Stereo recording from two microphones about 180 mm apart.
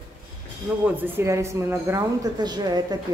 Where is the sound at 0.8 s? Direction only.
10° right (ahead or behind).